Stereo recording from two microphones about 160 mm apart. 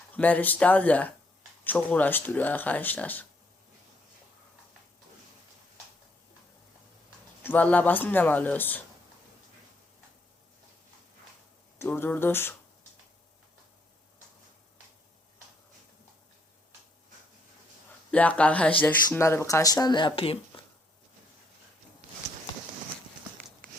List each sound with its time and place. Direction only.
0.2 s speech: 10° left (ahead or behind)
7.4 s speech: 10° left (ahead or behind)
11.8 s speech: 15° left (ahead or behind)
18.1 s speech: 10° left (ahead or behind); by 20.7 s 35° left (ahead or behind)